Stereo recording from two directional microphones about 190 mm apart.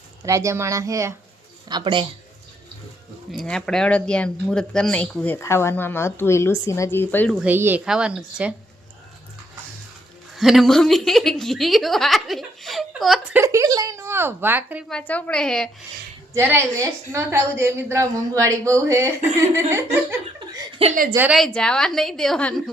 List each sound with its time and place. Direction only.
0.3 s a woman's voice: 15° right (ahead or behind)
3.3 s speech: 5° left (ahead or behind)
7.3 s speech: 10° right (ahead or behind)
10.3 s speech: centre (ahead or behind)
13.4 s a woman's voice: 15° right (ahead or behind)
14.8 s speech: 5° left (ahead or behind)
16.3 s a woman's voice: 15° right (ahead or behind)
20.8 s a woman's voice: 30° right (ahead or behind)
21.2 s speech: 5° right (ahead or behind)